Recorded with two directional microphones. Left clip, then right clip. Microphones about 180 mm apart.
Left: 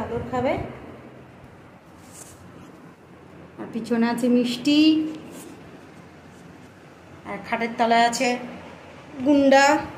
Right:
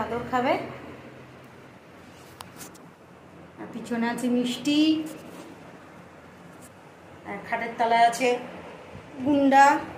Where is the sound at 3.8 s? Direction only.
30° left (ahead or behind).